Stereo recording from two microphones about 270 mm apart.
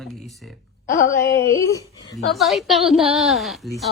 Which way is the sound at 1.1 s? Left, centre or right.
Left.